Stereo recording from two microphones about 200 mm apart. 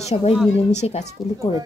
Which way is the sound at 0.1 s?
30° left (ahead or behind).